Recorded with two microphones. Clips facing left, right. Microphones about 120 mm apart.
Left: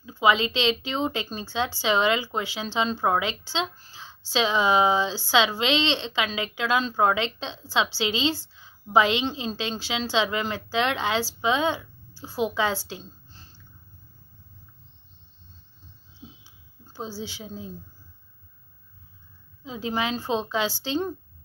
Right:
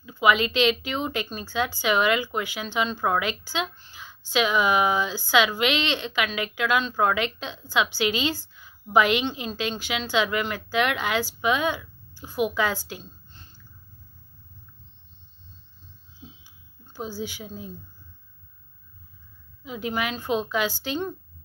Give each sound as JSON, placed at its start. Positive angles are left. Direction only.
{"t": 0.0, "sound": "speech", "side_deg": 25}
{"t": 16.8, "sound": "a woman's voice", "side_deg": 25}
{"t": 19.6, "sound": "speech", "side_deg": 25}